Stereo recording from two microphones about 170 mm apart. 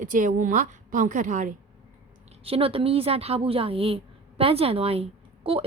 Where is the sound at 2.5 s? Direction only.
35° right (ahead or behind).